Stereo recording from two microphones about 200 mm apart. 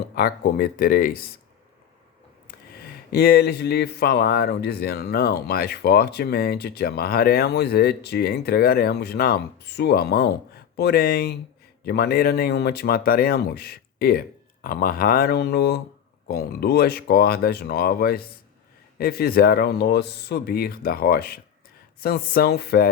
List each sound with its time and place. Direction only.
0.2 s speech: 50° left (ahead or behind)
3.1 s speech: 50° left (ahead or behind)